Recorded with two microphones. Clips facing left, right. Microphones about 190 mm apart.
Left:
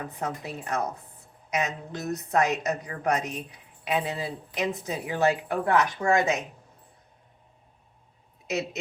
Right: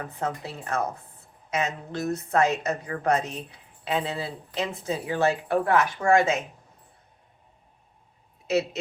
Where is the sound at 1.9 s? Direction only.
15° left (ahead or behind).